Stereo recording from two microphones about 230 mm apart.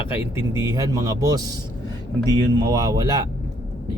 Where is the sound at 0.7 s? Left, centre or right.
Centre.